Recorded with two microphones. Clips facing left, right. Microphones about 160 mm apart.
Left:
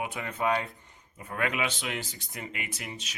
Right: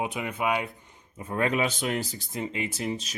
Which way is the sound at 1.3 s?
35° right (ahead or behind).